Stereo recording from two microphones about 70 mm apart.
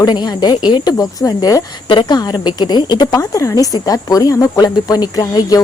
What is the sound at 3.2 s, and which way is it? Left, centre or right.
Speech, left.